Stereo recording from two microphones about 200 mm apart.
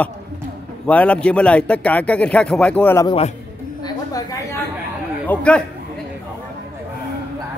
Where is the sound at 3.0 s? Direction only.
30° left (ahead or behind).